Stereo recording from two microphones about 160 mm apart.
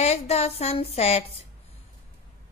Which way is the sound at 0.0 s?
40° left (ahead or behind).